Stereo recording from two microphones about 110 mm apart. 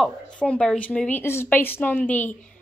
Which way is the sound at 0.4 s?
10° left (ahead or behind).